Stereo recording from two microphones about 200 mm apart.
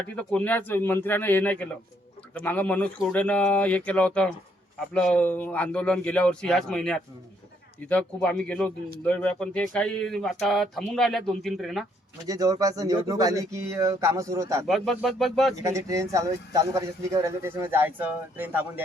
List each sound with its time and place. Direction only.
0.0 s a man's voice: 5° left (ahead or behind)
12.2 s speech: 15° right (ahead or behind)
14.7 s a man's voice: centre (ahead or behind)
15.5 s speech: 15° right (ahead or behind)